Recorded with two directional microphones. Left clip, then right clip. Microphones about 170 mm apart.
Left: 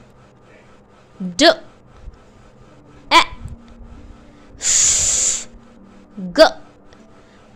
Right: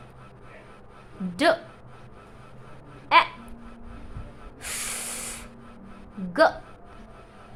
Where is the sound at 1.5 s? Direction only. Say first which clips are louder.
Left 7 dB; 40° left (ahead or behind).